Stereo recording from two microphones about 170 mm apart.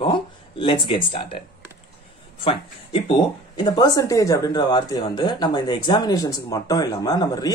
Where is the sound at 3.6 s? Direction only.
20° left (ahead or behind).